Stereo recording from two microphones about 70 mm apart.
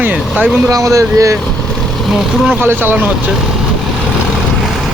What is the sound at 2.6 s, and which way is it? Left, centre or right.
Speech, right.